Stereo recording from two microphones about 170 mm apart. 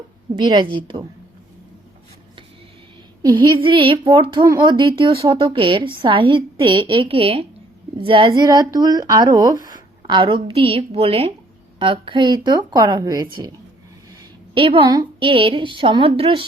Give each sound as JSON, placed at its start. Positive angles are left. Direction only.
{"t": 0.5, "sound": "speech", "side_deg": -25}
{"t": 3.3, "sound": "a woman's voice", "side_deg": -30}
{"t": 14.5, "sound": "a woman's voice", "side_deg": -30}